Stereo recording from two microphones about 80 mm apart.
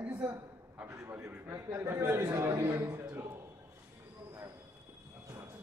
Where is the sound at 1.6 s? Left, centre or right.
Right.